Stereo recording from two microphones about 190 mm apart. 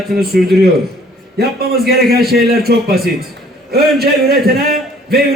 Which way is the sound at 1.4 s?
55° right (ahead or behind).